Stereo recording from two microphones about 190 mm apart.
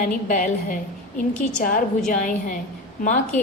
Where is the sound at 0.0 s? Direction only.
45° left (ahead or behind).